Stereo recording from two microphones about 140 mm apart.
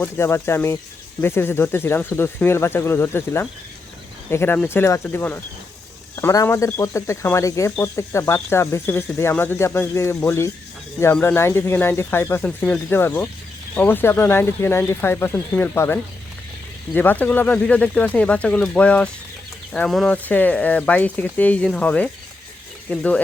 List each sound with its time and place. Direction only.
0.0 s speech: 15° left (ahead or behind)